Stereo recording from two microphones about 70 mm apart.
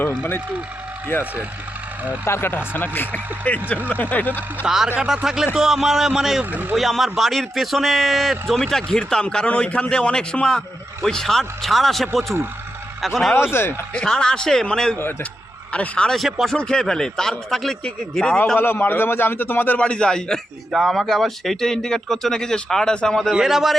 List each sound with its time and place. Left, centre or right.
0.1 s a man's voice: left
2.2 s a man's voice: left
4.6 s a man's voice: centre
6.4 s speech: right
6.7 s a man's voice: centre
13.5 s speech: left
13.9 s speech: centre
16.1 s a man's voice: centre
16.6 s a man's voice: centre; by 19.8 s left
19.8 s speech: centre
23.3 s a man's voice: centre